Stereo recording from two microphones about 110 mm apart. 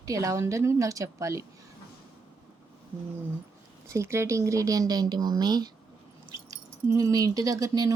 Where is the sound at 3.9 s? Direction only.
25° right (ahead or behind).